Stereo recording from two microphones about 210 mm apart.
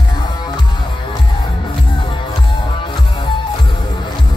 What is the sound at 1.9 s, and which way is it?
Music, 25° left (ahead or behind).